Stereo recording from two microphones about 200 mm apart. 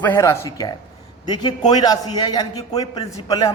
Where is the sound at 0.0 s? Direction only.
15° left (ahead or behind).